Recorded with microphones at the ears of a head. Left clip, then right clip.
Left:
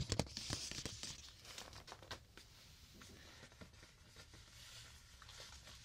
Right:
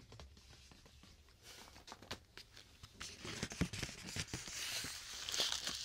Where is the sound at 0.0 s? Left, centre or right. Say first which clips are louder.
Left 16 dB; left.